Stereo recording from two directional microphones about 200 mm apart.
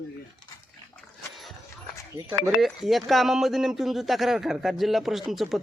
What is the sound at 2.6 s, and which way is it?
Speech, centre (ahead or behind).